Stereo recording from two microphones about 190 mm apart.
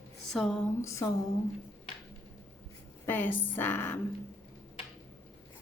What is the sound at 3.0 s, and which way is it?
Speech, 10° left (ahead or behind).